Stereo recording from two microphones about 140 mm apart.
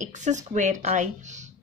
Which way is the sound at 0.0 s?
60° right (ahead or behind).